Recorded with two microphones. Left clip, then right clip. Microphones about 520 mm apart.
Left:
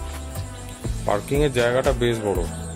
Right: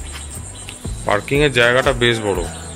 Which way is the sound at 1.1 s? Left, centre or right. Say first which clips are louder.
Right 5 dB; left.